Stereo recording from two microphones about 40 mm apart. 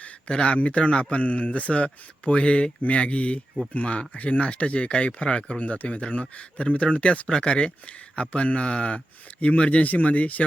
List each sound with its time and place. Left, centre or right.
0.0 s speech: left